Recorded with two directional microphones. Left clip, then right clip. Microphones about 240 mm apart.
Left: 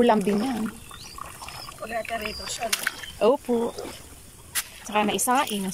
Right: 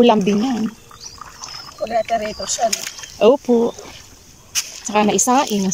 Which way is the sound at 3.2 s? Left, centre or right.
Centre.